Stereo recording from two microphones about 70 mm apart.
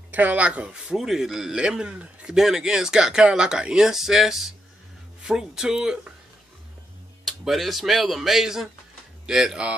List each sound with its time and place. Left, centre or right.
0.1 s speech: right; by 5.9 s centre
7.2 s speech: centre